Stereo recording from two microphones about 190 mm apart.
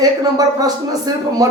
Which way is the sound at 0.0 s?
20° right (ahead or behind).